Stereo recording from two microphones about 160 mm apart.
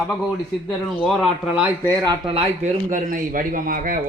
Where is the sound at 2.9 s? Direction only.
55° right (ahead or behind).